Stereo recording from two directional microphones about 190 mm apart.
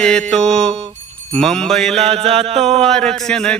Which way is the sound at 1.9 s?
35° right (ahead or behind).